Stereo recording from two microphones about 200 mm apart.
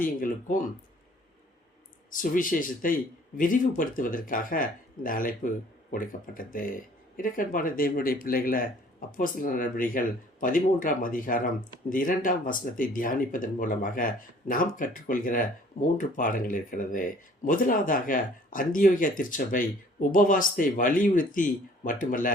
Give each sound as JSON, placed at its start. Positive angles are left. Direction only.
{"t": 0.0, "sound": "speech", "side_deg": 40}
{"t": 2.1, "sound": "speech", "side_deg": 40}